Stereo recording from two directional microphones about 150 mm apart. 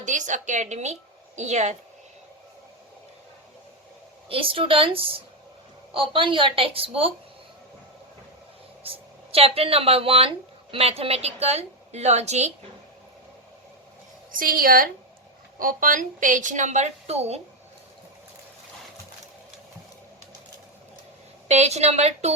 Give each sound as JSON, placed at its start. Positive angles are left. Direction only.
{"t": 0.0, "sound": "a woman's voice", "side_deg": -55}
{"t": 4.3, "sound": "a woman's voice", "side_deg": -35}
{"t": 9.3, "sound": "a woman's voice", "side_deg": -40}
{"t": 14.3, "sound": "a woman's voice", "side_deg": -70}
{"t": 21.4, "sound": "a woman's voice", "side_deg": -45}